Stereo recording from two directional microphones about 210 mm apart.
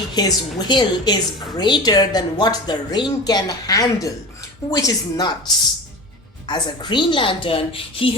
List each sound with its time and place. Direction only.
0.1 s a woman's voice: 20° left (ahead or behind)
6.5 s a woman's voice: 20° left (ahead or behind)